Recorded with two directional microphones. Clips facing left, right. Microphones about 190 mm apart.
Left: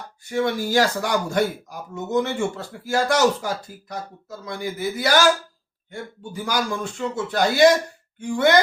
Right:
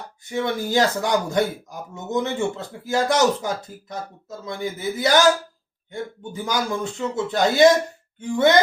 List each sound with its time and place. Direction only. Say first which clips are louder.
0.3 s speech: left 2 dB; 20° right (ahead or behind)